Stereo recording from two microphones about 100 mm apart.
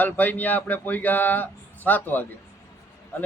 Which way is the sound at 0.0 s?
15° left (ahead or behind).